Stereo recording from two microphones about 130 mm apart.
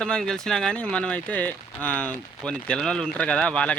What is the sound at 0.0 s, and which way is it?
Speech, 5° left (ahead or behind).